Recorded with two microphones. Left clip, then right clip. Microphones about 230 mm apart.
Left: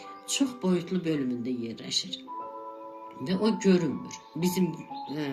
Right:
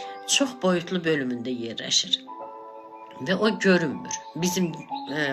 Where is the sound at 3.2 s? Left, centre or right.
Right.